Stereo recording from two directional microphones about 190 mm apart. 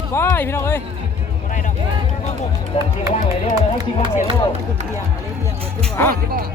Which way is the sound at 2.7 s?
35° left (ahead or behind).